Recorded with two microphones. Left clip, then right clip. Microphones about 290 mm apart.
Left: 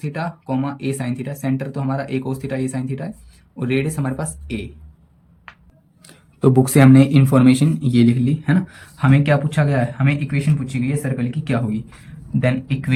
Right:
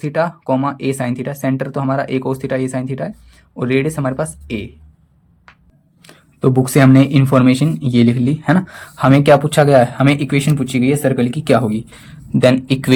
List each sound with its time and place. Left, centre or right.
0.0 s speech: centre
6.0 s speech: centre